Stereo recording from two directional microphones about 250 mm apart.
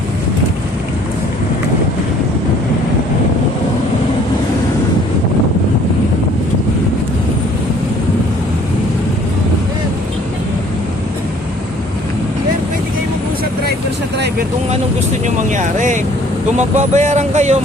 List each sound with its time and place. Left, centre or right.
15.4 s vehicle: right
16.6 s speech: right